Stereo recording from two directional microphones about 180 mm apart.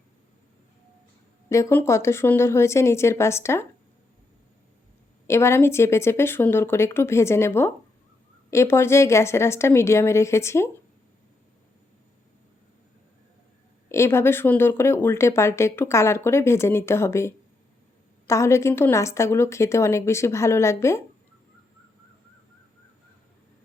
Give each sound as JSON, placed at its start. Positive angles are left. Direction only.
{"t": 1.5, "sound": "speech", "side_deg": 15}
{"t": 5.2, "sound": "speech", "side_deg": 15}
{"t": 13.9, "sound": "speech", "side_deg": 15}